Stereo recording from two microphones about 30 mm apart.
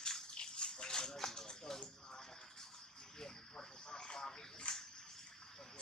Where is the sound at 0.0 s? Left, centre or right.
Left.